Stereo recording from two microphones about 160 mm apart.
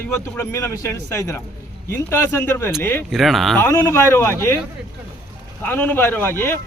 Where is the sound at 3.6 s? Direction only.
15° left (ahead or behind).